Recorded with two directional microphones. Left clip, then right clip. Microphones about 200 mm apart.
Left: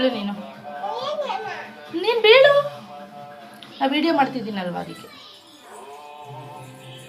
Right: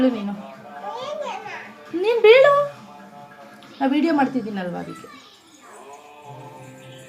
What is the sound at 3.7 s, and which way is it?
A woman's voice, 20° right (ahead or behind).